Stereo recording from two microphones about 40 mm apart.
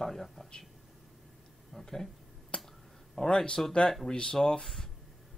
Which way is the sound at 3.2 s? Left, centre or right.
Left.